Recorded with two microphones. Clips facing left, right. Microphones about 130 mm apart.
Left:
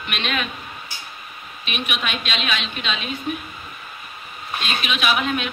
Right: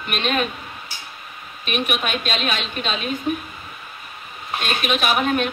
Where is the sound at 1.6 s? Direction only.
45° right (ahead or behind).